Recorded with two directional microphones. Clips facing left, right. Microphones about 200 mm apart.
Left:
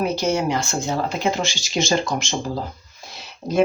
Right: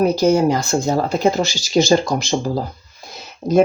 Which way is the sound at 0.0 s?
40° right (ahead or behind).